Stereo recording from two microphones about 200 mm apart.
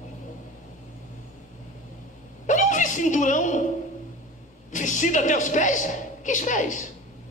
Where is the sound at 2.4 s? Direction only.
40° left (ahead or behind).